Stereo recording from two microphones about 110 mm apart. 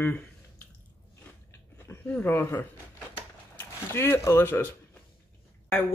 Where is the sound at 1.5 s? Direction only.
25° left (ahead or behind).